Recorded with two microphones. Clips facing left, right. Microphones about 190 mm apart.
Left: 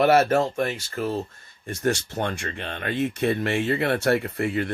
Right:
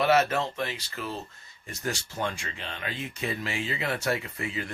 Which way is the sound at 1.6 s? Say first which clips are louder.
Left 9 dB; 65° left (ahead or behind).